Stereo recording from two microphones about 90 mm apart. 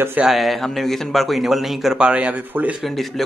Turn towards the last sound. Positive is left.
turn(degrees=0)  # may be behind; listen again after turning